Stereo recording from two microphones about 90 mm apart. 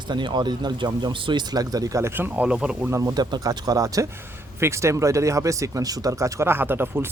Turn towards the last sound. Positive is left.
turn(degrees=-25)  # may be behind; listen again after turning